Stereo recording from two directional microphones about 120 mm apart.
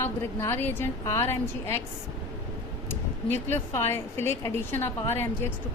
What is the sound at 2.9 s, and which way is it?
Speech, 20° left (ahead or behind).